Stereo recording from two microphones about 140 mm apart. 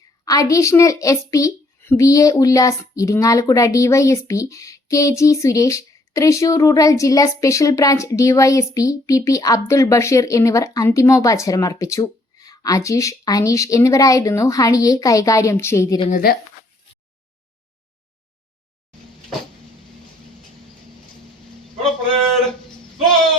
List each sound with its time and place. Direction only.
0.3 s a woman's voice: 25° left (ahead or behind)
16.0 s speech: 85° left